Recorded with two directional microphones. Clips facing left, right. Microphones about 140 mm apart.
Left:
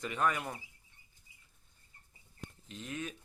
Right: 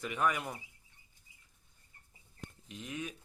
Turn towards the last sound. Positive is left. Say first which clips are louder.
# even
turn(degrees=-15)  # may be behind; listen again after turning